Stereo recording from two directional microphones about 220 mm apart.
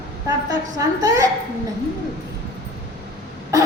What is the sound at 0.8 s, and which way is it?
Speech, 15° right (ahead or behind).